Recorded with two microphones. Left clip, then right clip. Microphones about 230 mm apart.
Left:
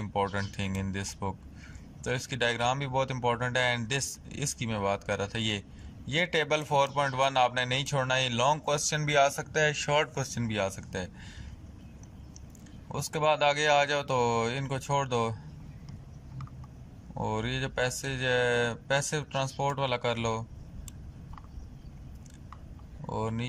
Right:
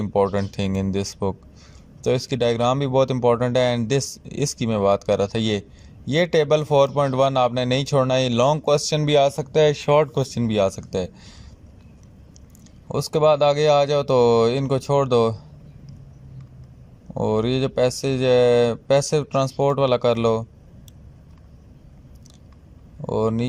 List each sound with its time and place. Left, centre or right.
0.0 s a man's voice: right
12.9 s a man's voice: right
17.2 s a man's voice: right
23.0 s a man's voice: right